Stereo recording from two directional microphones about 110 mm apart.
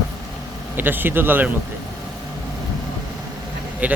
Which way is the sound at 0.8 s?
20° right (ahead or behind).